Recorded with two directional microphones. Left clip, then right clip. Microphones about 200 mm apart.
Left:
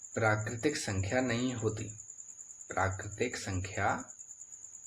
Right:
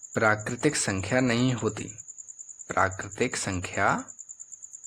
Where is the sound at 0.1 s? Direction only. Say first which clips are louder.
Right 7 dB; 50° right (ahead or behind).